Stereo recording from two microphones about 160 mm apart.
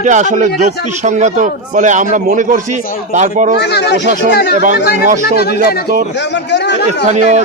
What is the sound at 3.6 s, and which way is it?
Speech, 90° left.